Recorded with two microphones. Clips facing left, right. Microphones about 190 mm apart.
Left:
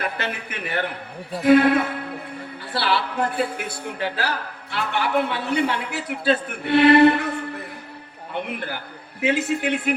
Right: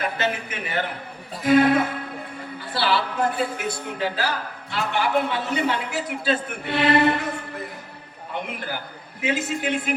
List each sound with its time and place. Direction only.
0.0 s a woman's voice: 60° left (ahead or behind)
9.2 s a woman's voice: 60° left (ahead or behind)